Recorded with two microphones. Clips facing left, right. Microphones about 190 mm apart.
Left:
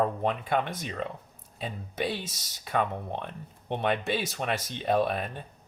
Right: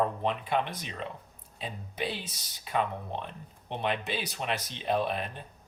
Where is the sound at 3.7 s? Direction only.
50° left (ahead or behind).